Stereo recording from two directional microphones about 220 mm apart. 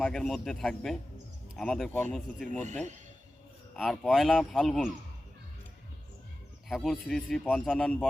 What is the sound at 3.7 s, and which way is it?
A man's voice, centre (ahead or behind).